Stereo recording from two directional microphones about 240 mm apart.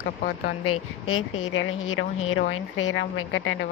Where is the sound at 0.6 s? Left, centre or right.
Left.